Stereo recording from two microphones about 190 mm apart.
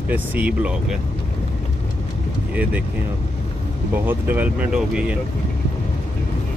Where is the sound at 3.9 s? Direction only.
10° right (ahead or behind).